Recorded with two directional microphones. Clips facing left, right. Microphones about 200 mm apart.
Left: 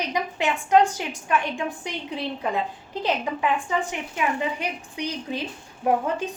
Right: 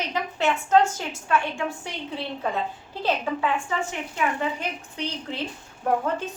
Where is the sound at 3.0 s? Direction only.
15° left (ahead or behind).